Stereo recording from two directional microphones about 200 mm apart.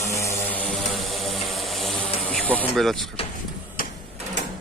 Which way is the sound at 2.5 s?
Centre (ahead or behind).